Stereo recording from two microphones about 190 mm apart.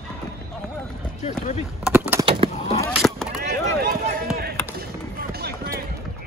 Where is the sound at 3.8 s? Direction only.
55° right (ahead or behind).